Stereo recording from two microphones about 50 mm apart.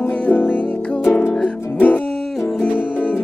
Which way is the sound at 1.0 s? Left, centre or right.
Left.